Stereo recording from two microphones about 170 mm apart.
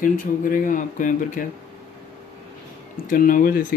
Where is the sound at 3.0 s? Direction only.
55° left (ahead or behind).